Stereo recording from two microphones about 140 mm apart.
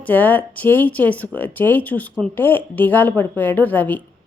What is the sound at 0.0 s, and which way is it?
Speech, 10° left (ahead or behind).